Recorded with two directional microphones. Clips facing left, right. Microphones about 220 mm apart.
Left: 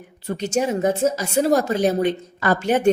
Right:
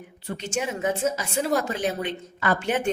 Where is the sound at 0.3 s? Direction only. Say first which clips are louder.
Left 7 dB; 40° left (ahead or behind).